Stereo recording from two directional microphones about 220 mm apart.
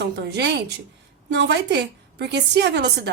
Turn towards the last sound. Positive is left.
turn(degrees=-50)  # may be behind; listen again after turning